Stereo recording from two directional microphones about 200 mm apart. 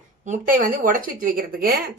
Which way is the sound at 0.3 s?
40° right (ahead or behind).